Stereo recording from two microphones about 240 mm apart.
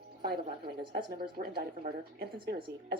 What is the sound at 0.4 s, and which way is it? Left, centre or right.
Speech, centre.